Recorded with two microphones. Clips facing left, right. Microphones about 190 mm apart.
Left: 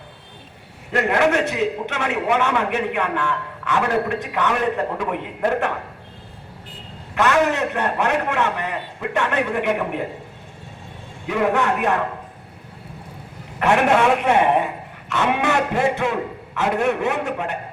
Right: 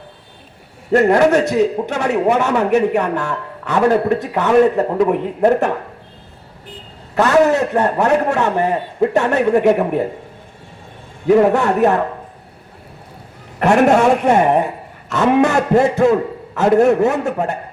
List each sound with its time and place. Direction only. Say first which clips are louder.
0.9 s a man's voice: right 7 dB; 40° right (ahead or behind)
7.2 s a man's voice: right 6 dB; 40° right (ahead or behind)
11.3 s a man's voice: right 8 dB; 40° right (ahead or behind)
13.6 s a man's voice: right 5 dB; 40° right (ahead or behind)